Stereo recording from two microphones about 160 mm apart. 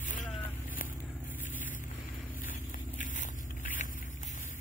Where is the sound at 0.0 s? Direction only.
55° left (ahead or behind).